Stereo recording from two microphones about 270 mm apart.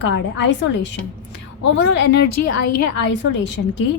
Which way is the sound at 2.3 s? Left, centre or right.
Left.